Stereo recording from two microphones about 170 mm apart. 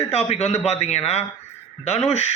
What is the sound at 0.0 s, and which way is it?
Speech, 40° left (ahead or behind).